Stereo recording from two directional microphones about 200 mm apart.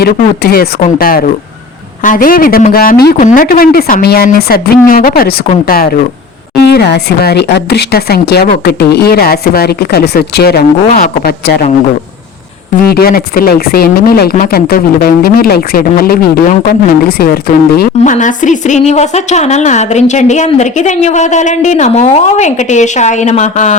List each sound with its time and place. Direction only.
0.0 s speech: 45° left (ahead or behind)
12.9 s a woman's voice: 50° left (ahead or behind)